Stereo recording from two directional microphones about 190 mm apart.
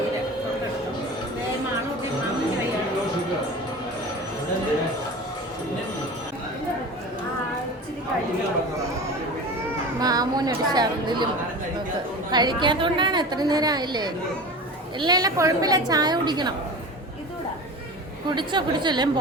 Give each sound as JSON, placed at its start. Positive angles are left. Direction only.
{"t": 10.0, "sound": "a sound", "side_deg": -20}
{"t": 12.3, "sound": "a woman's voice", "side_deg": -20}
{"t": 18.3, "sound": "a woman's voice", "side_deg": -25}